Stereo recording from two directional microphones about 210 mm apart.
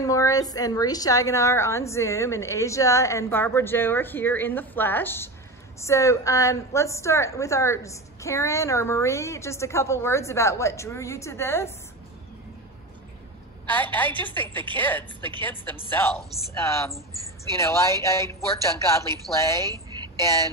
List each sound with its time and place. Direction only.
0.0 s a woman's voice: 15° left (ahead or behind)
13.7 s a woman's voice: 10° left (ahead or behind)
19.7 s a sound: 20° right (ahead or behind)